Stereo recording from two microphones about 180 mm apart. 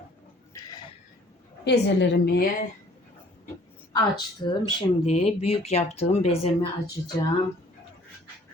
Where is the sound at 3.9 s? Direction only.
25° left (ahead or behind).